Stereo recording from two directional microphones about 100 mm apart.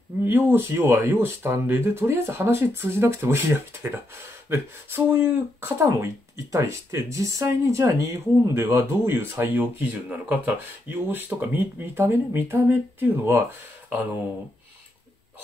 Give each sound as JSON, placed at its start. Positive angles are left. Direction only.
{"t": 0.2, "sound": "speech", "side_deg": -20}